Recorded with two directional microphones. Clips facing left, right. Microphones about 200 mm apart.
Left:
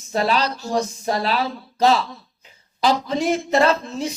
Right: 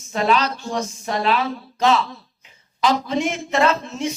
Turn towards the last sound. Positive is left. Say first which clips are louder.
# left 1 dB
turn(degrees=35)  # may be behind; listen again after turning